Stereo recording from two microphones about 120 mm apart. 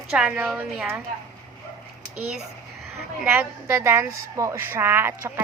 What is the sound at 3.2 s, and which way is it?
A woman's voice, 20° right (ahead or behind).